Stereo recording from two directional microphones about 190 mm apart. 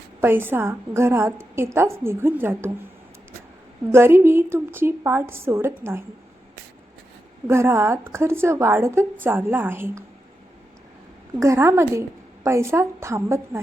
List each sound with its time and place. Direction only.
0.2 s a woman's voice: 10° right (ahead or behind)
3.9 s a woman's voice: 15° right (ahead or behind)
7.4 s a woman's voice: 15° right (ahead or behind)
11.3 s a woman's voice: 15° right (ahead or behind)